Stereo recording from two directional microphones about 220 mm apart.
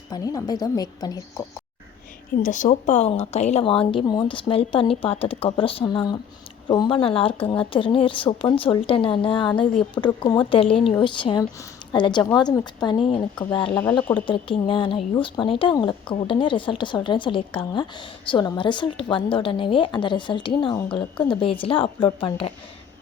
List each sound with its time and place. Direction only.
0.1 s a woman's voice: 15° left (ahead or behind)
2.4 s a woman's voice: 35° left (ahead or behind)
14.0 s a woman's voice: 10° left (ahead or behind)
14.3 s speech: 25° left (ahead or behind)